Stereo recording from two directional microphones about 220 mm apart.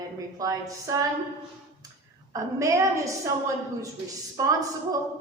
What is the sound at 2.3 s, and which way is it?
A woman's voice, 15° right (ahead or behind).